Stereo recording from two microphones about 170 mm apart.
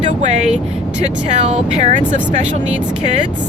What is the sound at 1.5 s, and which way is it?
Speech, 40° right (ahead or behind).